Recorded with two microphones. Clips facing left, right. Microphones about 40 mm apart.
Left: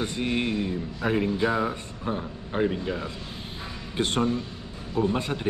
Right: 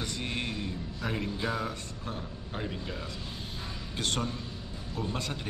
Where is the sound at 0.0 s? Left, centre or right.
Left.